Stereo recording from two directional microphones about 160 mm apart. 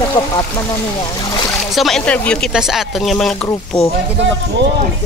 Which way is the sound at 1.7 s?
Centre (ahead or behind).